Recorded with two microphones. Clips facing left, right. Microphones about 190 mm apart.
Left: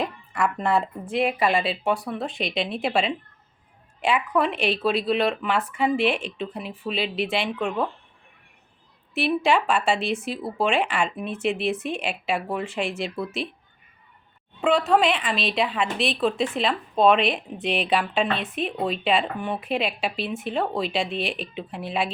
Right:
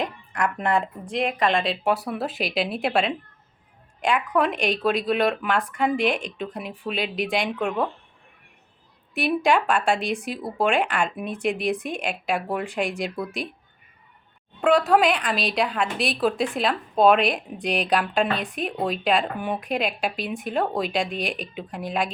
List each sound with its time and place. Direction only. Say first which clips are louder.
0.0 s a woman's voice: left 1 dB; 5° left (ahead or behind)
9.1 s a woman's voice: even; centre (ahead or behind)
11.7 s a woman's voice: even; 15° right (ahead or behind)
11.9 s a woman's voice: even; 5° left (ahead or behind)
14.6 s a woman's voice: right 1 dB; centre (ahead or behind)